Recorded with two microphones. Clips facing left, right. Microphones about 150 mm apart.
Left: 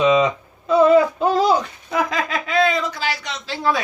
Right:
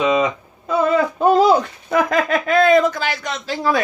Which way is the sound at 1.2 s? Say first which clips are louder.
Right 4 dB; 50° right (ahead or behind).